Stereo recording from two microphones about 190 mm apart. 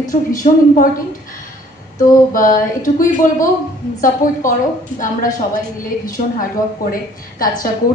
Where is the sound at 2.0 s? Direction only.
45° left (ahead or behind).